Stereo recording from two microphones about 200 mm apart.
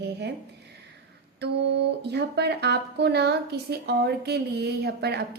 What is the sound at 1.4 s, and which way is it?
A woman's voice, 55° right (ahead or behind).